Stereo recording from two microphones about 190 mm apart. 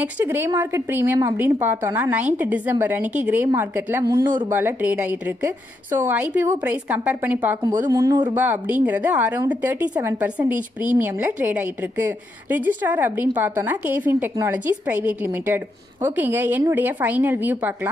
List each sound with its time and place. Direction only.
0.0 s a woman's voice: 10° right (ahead or behind)
8.4 s a woman's voice: 10° right (ahead or behind)